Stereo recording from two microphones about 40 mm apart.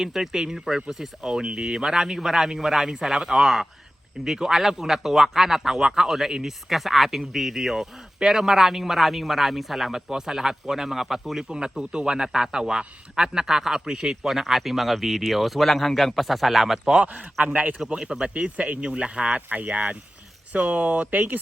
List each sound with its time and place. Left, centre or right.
0.0 s a man's voice: centre
14.3 s a man's voice: centre
17.0 s speech: right
17.8 s speech: centre
18.3 s speech: right
19.5 s speech: right